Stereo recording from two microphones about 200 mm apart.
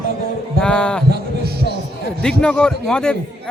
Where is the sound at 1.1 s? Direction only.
55° right (ahead or behind).